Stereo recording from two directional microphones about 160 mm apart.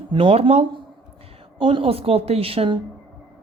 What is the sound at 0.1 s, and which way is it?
Speech, 35° right (ahead or behind).